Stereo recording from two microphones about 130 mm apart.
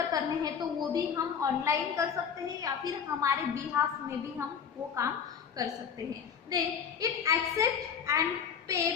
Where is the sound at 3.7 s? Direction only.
15° right (ahead or behind).